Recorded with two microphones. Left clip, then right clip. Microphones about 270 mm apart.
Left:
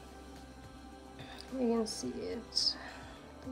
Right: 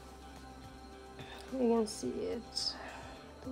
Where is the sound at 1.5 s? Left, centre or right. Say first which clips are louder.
Right 2 dB; centre.